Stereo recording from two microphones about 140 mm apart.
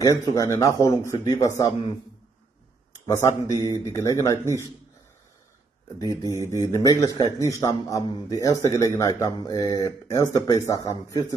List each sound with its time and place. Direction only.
0.0 s speech: 20° left (ahead or behind)
3.1 s speech: 20° left (ahead or behind)
6.6 s speech: 25° left (ahead or behind)